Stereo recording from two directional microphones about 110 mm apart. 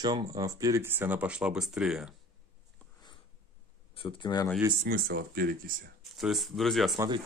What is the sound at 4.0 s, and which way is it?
Speech, 50° left (ahead or behind).